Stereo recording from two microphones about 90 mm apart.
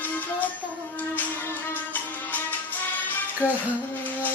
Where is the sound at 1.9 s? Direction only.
20° left (ahead or behind).